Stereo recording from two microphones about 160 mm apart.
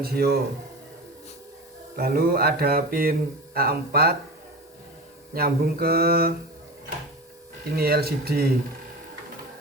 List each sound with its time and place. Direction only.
0.0 s speech: 75° right (ahead or behind)
2.0 s speech: 75° right (ahead or behind)
5.3 s speech: 75° right (ahead or behind)
7.8 s speech: 75° right (ahead or behind)